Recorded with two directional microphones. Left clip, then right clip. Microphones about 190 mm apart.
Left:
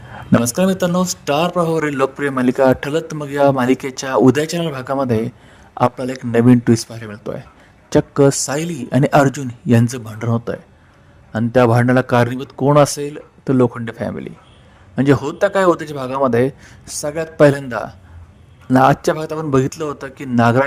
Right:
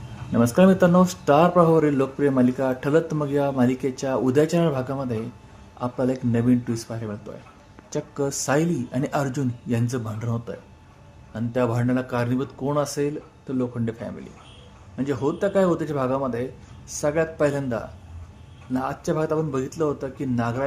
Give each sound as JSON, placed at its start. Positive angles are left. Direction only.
{"t": 0.4, "sound": "speech", "side_deg": 0}
{"t": 1.8, "sound": "speech", "side_deg": 50}
{"t": 17.0, "sound": "speech", "side_deg": 0}
{"t": 17.3, "sound": "speech", "side_deg": 45}